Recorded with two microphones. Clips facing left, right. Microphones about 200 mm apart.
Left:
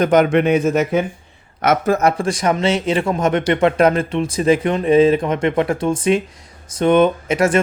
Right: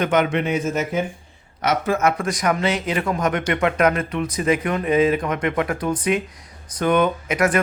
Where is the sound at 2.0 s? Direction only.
35° left (ahead or behind).